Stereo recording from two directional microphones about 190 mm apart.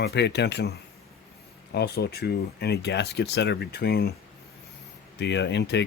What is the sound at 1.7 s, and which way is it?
Speech, 55° left (ahead or behind).